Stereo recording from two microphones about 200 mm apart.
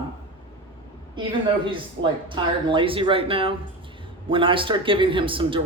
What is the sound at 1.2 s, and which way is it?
A man's voice, 25° right (ahead or behind).